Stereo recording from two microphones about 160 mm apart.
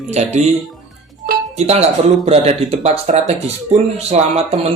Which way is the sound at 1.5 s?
40° right (ahead or behind).